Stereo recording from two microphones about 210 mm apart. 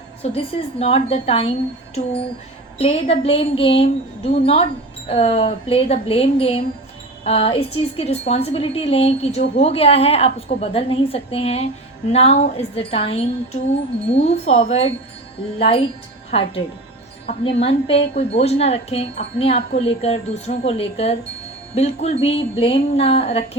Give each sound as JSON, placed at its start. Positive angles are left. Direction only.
{"t": 0.2, "sound": "a woman's voice", "side_deg": 30}
{"t": 2.7, "sound": "a woman's voice", "side_deg": 30}
{"t": 17.2, "sound": "a woman's voice", "side_deg": 30}